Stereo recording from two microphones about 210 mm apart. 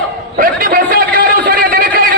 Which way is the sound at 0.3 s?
40° right (ahead or behind).